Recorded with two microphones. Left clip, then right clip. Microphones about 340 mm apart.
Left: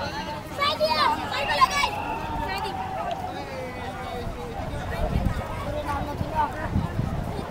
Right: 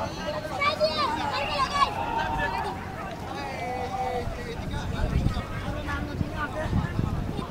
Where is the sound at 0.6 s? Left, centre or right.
Left.